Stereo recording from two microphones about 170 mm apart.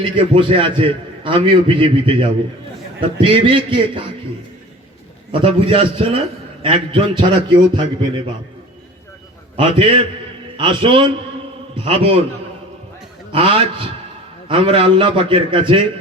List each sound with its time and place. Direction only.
0.0 s a man's voice: 30° right (ahead or behind)
5.3 s a man's voice: 30° right (ahead or behind)
9.6 s a man's voice: 30° right (ahead or behind)
13.3 s a man's voice: 30° right (ahead or behind)